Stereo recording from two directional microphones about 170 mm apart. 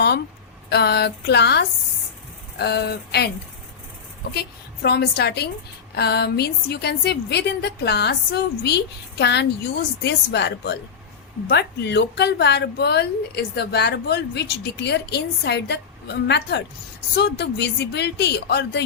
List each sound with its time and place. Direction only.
0.7 s speech: 75° left (ahead or behind)
4.4 s speech: 70° left (ahead or behind)